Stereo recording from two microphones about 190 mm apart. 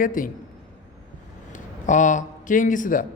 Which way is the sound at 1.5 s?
40° left (ahead or behind).